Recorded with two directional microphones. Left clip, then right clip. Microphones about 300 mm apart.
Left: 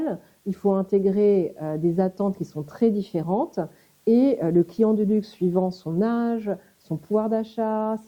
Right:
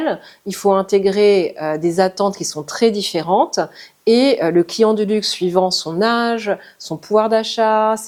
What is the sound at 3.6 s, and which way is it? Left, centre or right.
Speech, centre.